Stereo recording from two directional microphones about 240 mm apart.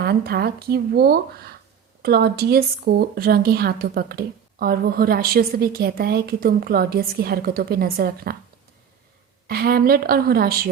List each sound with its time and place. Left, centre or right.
0.0 s speech: right
9.5 s speech: right